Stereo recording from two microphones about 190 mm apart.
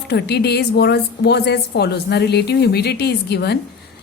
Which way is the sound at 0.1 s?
60° left (ahead or behind).